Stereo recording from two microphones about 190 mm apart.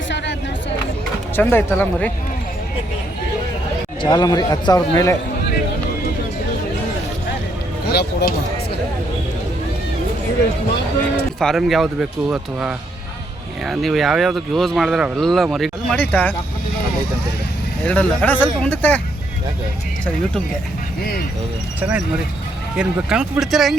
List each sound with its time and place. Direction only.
1.4 s speech: 10° left (ahead or behind)
4.0 s a man's voice: 20° left (ahead or behind)
7.9 s speech: 55° left (ahead or behind)
11.3 s speech: centre (ahead or behind)
17.8 s speech: 5° left (ahead or behind)
21.0 s speech: 50° left (ahead or behind)
21.8 s speech: 10° right (ahead or behind)